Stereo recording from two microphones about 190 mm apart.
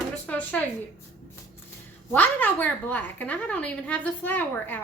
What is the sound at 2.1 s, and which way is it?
A woman's voice, 10° left (ahead or behind).